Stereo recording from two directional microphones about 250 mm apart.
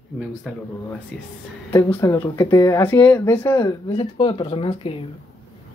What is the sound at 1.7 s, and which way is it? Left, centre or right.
Speech, centre.